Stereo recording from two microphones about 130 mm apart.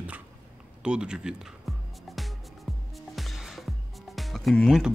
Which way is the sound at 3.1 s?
Centre (ahead or behind).